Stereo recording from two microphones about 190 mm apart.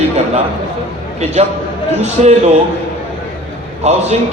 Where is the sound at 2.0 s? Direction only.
35° right (ahead or behind).